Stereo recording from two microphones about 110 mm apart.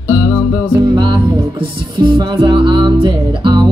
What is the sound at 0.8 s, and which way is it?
Music, 40° right (ahead or behind).